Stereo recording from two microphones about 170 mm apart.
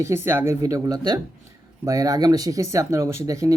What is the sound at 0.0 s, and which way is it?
Speech, 15° right (ahead or behind).